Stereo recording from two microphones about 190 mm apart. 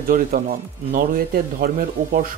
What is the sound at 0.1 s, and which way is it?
Speech, 45° right (ahead or behind).